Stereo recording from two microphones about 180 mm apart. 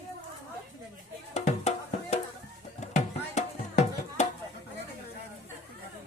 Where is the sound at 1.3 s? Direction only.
40° left (ahead or behind).